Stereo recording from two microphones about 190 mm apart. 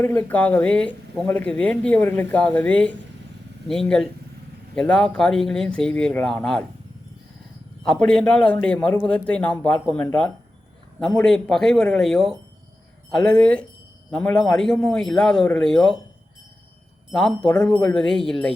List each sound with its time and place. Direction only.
0.0 s speech: 10° left (ahead or behind)
7.9 s speech: 5° left (ahead or behind)
17.1 s speech: 5° left (ahead or behind)